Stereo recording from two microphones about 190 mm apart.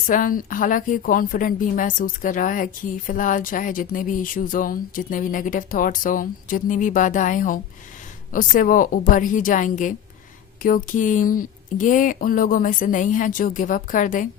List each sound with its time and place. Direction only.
0.1 s a woman's voice: 45° left (ahead or behind)